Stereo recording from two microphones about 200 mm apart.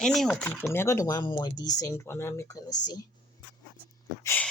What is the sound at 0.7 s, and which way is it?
Speech, 15° left (ahead or behind).